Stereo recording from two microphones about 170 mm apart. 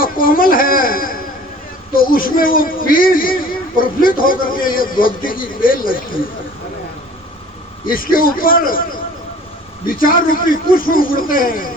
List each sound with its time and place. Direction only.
0.0 s a sound: 55° left (ahead or behind)
1.9 s a man's voice: 55° left (ahead or behind)
7.9 s a man's voice: 55° left (ahead or behind)
9.8 s a man's voice: 55° left (ahead or behind)